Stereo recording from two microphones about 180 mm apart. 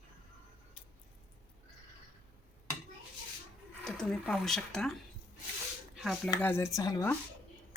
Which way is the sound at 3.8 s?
5° left (ahead or behind).